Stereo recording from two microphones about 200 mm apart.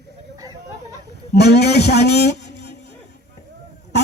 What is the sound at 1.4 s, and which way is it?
Speech, 55° left (ahead or behind).